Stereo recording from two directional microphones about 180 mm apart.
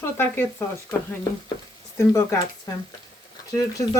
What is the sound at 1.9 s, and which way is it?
Speech, 15° left (ahead or behind).